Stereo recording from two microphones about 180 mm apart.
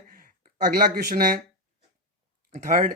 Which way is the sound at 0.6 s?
55° right (ahead or behind).